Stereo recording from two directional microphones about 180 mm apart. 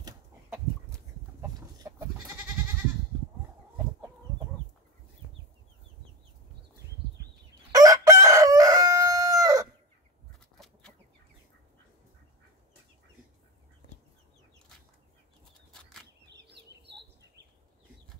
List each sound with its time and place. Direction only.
1.8 s goat: 20° right (ahead or behind)
7.7 s crowing: 20° right (ahead or behind)
16.3 s chicken: 70° right (ahead or behind)